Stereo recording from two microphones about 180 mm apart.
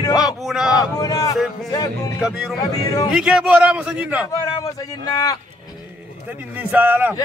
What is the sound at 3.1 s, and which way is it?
A man's voice, 5° right (ahead or behind).